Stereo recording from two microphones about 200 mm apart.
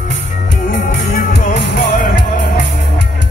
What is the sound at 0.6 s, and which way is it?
Music, 40° left (ahead or behind).